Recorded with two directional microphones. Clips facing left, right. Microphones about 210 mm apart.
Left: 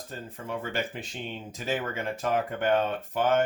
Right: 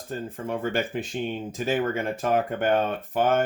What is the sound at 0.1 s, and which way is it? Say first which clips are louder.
Speech: right 6 dB; 50° right (ahead or behind).